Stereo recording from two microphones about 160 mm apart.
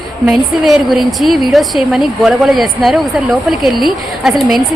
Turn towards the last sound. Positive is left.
turn(degrees=0)  # may be behind; listen again after turning